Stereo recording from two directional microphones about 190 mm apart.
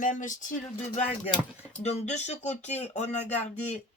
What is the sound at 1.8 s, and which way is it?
Speech, 35° left (ahead or behind).